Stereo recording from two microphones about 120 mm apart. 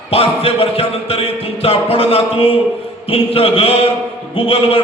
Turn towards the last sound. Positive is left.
turn(degrees=50)  # may be behind; listen again after turning